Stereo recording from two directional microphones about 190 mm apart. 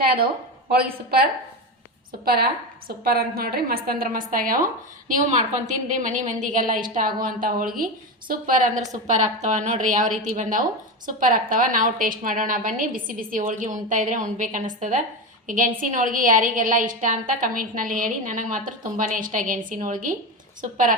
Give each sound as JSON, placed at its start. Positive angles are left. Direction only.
{"t": 0.0, "sound": "a woman's voice", "side_deg": -50}